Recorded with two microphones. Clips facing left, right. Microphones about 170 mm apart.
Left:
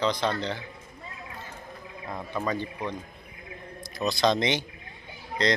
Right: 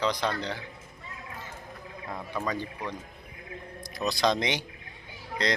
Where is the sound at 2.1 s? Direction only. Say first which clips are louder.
Left 2 dB; 10° left (ahead or behind).